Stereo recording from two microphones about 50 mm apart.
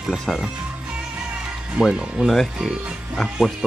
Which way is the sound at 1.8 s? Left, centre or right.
Centre.